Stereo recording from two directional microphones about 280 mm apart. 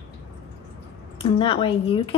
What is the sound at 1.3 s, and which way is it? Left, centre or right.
Speech, centre.